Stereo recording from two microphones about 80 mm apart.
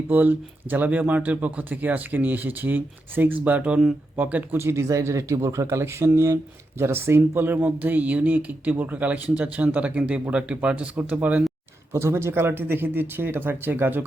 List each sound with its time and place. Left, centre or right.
0.1 s speech: right
4.6 s speech: right
11.9 s speech: right